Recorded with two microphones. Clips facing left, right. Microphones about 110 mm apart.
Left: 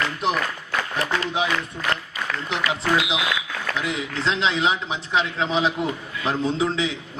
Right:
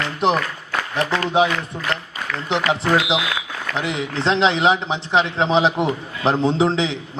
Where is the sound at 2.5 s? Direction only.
30° right (ahead or behind).